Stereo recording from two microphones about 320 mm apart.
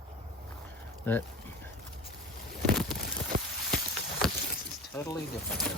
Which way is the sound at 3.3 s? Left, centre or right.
Right.